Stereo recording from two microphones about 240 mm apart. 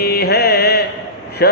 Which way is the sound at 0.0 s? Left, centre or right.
Left.